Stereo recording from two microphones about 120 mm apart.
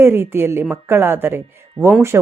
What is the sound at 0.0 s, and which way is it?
Speech, 20° right (ahead or behind).